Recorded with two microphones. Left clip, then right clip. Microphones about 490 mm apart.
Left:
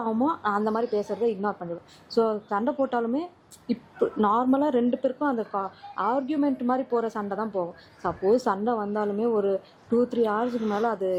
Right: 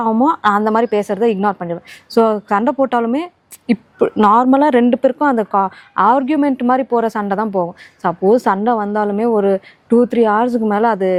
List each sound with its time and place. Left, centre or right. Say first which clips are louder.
0.0 s a woman's voice: right 12 dB; right